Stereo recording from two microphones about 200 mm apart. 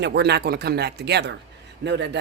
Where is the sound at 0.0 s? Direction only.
55° right (ahead or behind).